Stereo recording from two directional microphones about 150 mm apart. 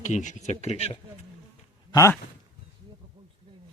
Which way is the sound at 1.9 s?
20° left (ahead or behind).